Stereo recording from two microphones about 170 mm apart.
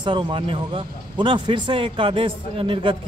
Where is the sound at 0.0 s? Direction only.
30° right (ahead or behind).